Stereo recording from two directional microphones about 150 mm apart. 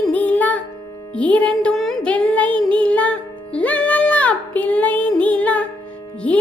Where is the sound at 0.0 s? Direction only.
10° left (ahead or behind).